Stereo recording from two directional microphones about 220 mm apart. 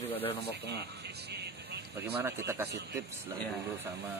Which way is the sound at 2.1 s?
10° right (ahead or behind).